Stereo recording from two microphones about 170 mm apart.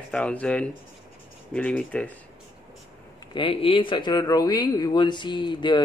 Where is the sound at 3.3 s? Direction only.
30° left (ahead or behind).